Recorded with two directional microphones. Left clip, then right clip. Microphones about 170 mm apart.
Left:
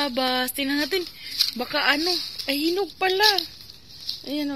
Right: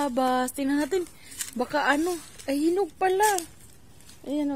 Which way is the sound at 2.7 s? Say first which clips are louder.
Right 1 dB; 20° right (ahead or behind).